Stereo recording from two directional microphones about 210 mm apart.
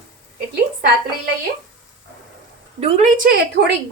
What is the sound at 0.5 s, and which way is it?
Speech, 45° right (ahead or behind).